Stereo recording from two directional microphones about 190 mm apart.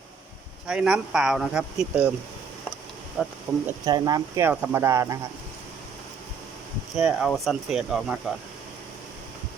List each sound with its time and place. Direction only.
0.7 s speech: 5° right (ahead or behind)
3.2 s speech: 5° right (ahead or behind)
3.7 s speech: 20° right (ahead or behind)
6.9 s speech: 5° right (ahead or behind)